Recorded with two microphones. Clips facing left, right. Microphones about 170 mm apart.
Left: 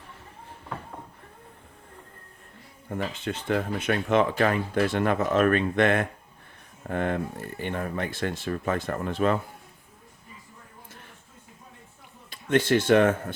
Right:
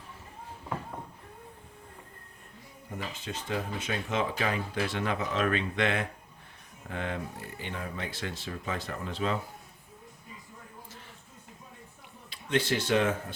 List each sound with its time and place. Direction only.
2.9 s speech: 60° left (ahead or behind)
12.3 s speech: 50° left (ahead or behind)